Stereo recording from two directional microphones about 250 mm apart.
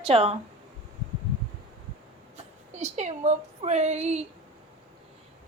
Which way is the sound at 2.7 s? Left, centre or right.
Right.